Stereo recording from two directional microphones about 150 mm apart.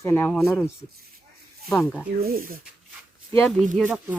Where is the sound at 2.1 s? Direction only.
85° right.